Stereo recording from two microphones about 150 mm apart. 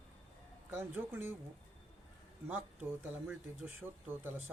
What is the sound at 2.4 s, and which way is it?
A man's voice, 10° right (ahead or behind).